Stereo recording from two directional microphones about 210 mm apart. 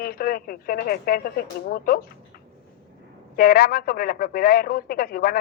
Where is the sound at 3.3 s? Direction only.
45° left (ahead or behind).